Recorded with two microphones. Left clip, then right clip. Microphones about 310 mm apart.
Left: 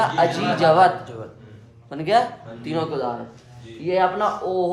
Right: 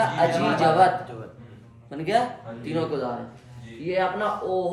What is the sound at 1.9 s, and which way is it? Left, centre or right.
Speech, centre.